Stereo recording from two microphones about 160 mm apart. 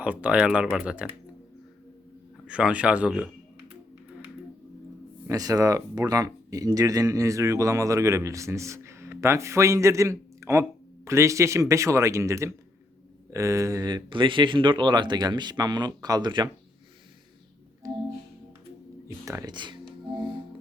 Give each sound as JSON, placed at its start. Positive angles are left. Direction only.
{"t": 0.0, "sound": "speech", "side_deg": -10}
{"t": 2.5, "sound": "speech", "side_deg": -5}
{"t": 5.3, "sound": "speech", "side_deg": -20}
{"t": 17.8, "sound": "organ", "side_deg": -20}
{"t": 19.0, "sound": "music", "side_deg": -20}